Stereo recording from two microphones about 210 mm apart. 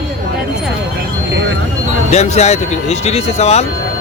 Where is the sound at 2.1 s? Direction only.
30° left (ahead or behind).